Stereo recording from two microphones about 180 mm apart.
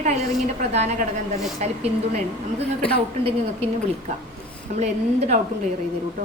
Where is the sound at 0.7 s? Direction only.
40° right (ahead or behind).